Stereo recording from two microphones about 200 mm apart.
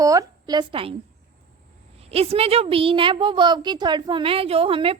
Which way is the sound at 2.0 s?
30° right (ahead or behind).